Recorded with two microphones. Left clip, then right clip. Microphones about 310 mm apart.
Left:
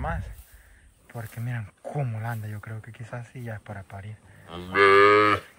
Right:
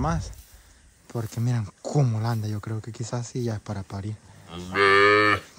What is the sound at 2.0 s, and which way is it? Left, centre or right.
Speech, centre.